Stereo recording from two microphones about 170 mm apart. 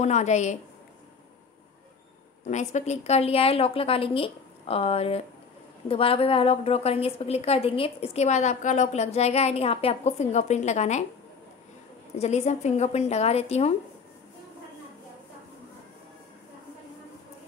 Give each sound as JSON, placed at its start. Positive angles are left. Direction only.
{"t": 0.0, "sound": "a woman's voice", "side_deg": 45}
{"t": 2.5, "sound": "a woman's voice", "side_deg": 45}
{"t": 12.2, "sound": "a woman's voice", "side_deg": 40}